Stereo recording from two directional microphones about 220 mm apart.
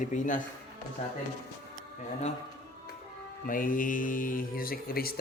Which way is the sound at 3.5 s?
40° left (ahead or behind).